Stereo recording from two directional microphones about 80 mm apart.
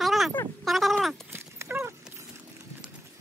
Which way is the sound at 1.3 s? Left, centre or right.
Right.